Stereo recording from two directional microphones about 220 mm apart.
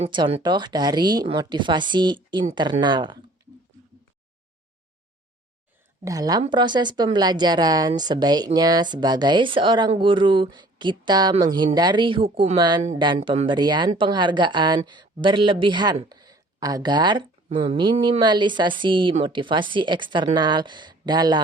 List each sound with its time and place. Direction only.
0.0 s speech: 20° right (ahead or behind)
6.1 s a woman's voice: 15° right (ahead or behind)